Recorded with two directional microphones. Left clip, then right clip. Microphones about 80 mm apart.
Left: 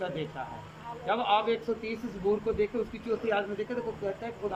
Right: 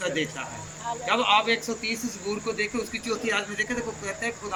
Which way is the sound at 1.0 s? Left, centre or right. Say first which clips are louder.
Right 5 dB; left.